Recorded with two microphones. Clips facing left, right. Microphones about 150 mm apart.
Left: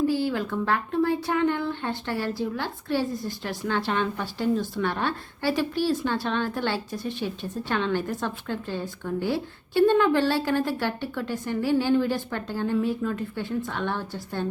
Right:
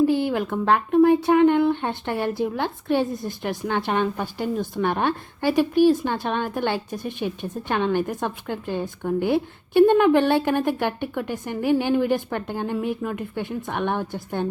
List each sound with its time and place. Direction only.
0.1 s a woman's voice: 20° right (ahead or behind)